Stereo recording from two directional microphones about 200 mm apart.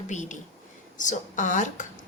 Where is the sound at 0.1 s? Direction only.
35° left (ahead or behind).